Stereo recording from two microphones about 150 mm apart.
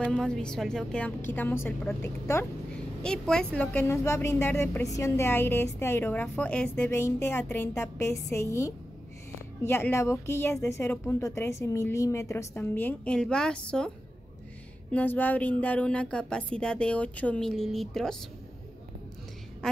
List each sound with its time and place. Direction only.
0.0 s a woman's voice: 5° left (ahead or behind)
3.0 s a woman's voice: 5° left (ahead or behind)
19.6 s a sound: 5° left (ahead or behind)